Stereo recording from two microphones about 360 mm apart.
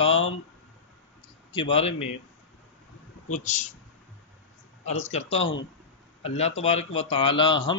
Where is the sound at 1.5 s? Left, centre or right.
Centre.